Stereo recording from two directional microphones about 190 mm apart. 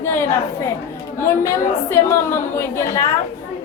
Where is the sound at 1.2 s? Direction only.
15° left (ahead or behind).